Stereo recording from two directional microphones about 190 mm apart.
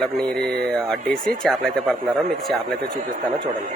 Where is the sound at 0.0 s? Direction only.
Centre (ahead or behind).